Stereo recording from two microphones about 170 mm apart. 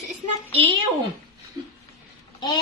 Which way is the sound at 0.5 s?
35° right (ahead or behind).